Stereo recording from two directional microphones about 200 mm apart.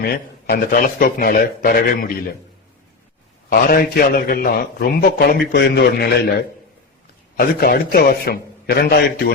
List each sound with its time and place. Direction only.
0.0 s a man's voice: 50° left (ahead or behind)
3.5 s a man's voice: 50° left (ahead or behind)
7.3 s a man's voice: 50° left (ahead or behind)